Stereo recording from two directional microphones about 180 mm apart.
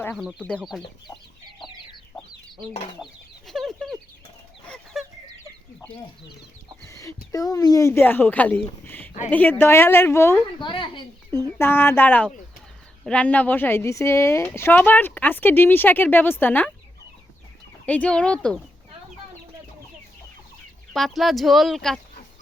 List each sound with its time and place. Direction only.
0.2 s speech: centre (ahead or behind)
1.5 s chicken: 25° left (ahead or behind)
3.0 s chicken: centre (ahead or behind)
6.8 s chicken: 15° left (ahead or behind)
7.3 s speech: 20° left (ahead or behind)
10.6 s speech: 25° left (ahead or behind)
11.3 s speech: 15° left (ahead or behind)
17.8 s speech: 5° left (ahead or behind)
20.9 s speech: centre (ahead or behind)